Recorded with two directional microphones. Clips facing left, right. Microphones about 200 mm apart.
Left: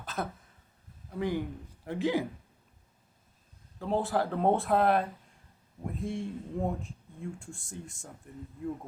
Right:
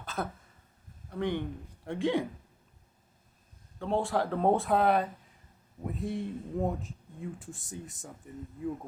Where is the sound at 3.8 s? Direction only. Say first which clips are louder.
Even; centre (ahead or behind).